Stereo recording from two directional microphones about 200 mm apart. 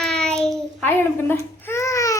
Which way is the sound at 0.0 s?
5° left (ahead or behind).